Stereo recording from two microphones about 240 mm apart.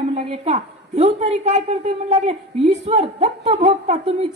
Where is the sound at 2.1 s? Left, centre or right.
Right.